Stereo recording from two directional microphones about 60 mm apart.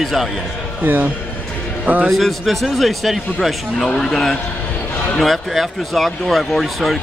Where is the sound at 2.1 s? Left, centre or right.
Centre.